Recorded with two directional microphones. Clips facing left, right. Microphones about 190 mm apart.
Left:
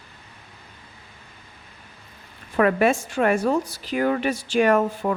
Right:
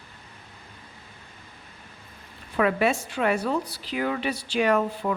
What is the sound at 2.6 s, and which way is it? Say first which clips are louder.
A woman's voice: left 4 dB; 50° left (ahead or behind).